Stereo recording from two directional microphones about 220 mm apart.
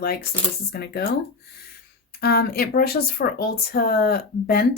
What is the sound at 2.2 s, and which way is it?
Speech, 45° left (ahead or behind).